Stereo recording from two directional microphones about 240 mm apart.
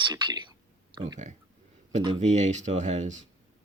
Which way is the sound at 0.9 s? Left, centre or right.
Centre.